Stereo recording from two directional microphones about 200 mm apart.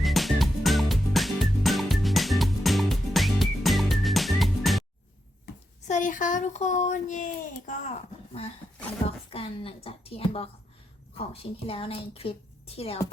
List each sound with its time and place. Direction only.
0.0 s music: centre (ahead or behind)
5.9 s a child's voice: 40° left (ahead or behind)